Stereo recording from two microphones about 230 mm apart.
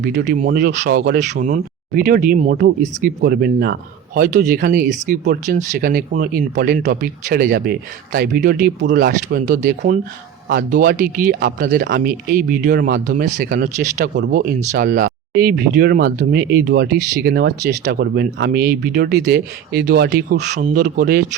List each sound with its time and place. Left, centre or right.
0.0 s speech: right